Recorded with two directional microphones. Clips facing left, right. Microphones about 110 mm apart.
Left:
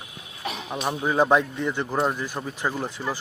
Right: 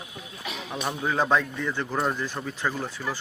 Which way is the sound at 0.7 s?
15° left (ahead or behind).